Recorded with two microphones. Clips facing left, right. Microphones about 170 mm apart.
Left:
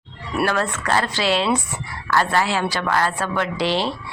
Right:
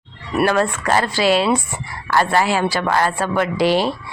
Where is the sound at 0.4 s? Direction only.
15° right (ahead or behind).